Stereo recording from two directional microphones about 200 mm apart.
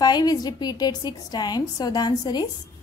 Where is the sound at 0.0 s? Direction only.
20° left (ahead or behind).